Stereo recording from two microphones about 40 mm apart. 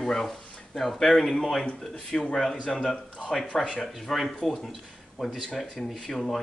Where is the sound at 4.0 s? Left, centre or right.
Centre.